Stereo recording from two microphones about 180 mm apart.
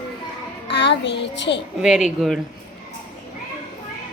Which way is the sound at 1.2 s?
75° left (ahead or behind).